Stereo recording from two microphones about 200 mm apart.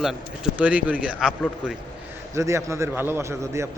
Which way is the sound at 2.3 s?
15° right (ahead or behind).